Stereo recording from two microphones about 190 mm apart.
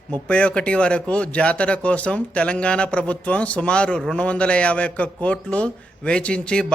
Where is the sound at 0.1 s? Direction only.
5° left (ahead or behind).